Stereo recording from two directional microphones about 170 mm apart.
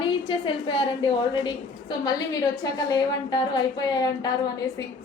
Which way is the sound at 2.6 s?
25° left (ahead or behind).